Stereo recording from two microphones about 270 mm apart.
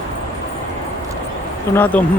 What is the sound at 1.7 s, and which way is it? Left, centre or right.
Speech, centre.